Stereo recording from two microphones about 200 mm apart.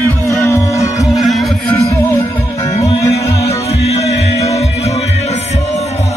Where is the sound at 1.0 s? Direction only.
Centre (ahead or behind).